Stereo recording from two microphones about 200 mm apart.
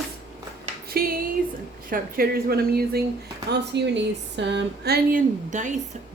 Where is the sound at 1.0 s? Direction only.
50° right (ahead or behind).